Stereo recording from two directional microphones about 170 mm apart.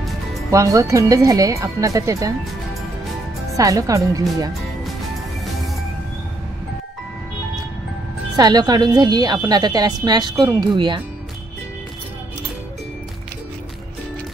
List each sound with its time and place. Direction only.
0.5 s a woman's voice: 20° right (ahead or behind)
3.5 s a woman's voice: 20° right (ahead or behind)
8.4 s a woman's voice: 25° right (ahead or behind)